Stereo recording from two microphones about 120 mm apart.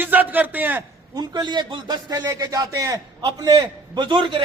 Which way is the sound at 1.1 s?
35° right (ahead or behind).